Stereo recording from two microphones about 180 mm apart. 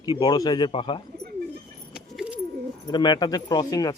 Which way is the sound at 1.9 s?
5° right (ahead or behind).